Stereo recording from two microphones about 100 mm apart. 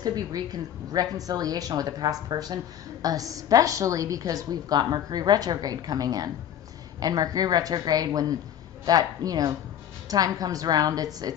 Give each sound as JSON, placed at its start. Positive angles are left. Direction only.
{"t": 0.0, "sound": "a woman's voice", "side_deg": -40}